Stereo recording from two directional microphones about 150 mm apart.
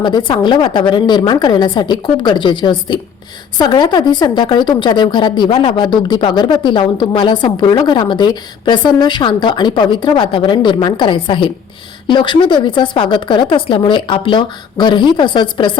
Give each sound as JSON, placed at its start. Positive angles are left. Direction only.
{"t": 0.0, "sound": "a woman's voice", "side_deg": 30}